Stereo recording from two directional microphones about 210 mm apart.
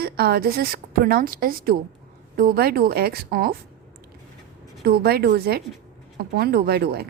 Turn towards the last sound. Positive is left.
turn(degrees=-50)  # may be behind; listen again after turning